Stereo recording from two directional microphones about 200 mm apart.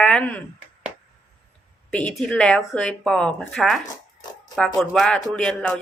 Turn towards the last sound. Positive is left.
turn(degrees=5)  # may be behind; listen again after turning